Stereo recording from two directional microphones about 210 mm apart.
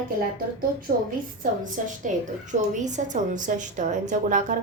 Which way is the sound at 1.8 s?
35° right (ahead or behind).